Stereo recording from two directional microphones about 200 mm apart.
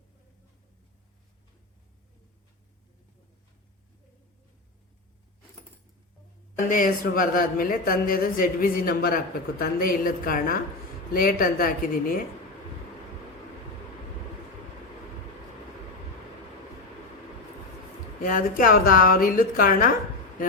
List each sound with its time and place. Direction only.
6.7 s a woman's voice: 45° left (ahead or behind)
18.2 s a woman's voice: 45° left (ahead or behind)